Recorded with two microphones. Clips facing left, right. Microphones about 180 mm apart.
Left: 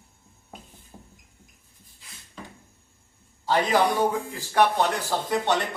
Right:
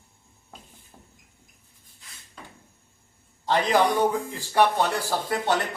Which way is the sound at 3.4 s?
10° left (ahead or behind).